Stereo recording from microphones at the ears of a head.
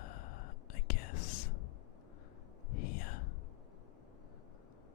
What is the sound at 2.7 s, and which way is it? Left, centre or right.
Whispering, left.